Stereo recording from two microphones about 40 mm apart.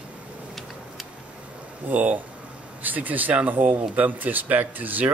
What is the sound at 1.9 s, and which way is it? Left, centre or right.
Speech, right.